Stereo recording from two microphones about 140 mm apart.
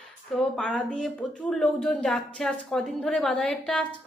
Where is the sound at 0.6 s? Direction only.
5° left (ahead or behind).